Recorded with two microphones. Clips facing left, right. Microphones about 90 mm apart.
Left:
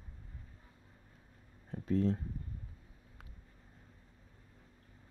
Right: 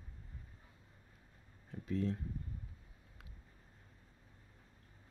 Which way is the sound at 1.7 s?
40° left (ahead or behind).